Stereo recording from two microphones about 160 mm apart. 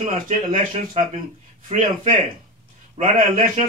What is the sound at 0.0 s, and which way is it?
Speech, 55° right (ahead or behind).